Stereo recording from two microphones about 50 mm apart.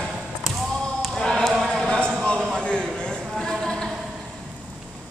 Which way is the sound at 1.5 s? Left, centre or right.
Centre.